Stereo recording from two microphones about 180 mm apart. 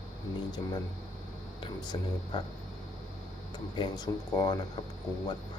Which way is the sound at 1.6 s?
25° left (ahead or behind).